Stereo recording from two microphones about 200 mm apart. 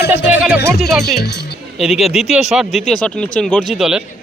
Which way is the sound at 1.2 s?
55° left (ahead or behind).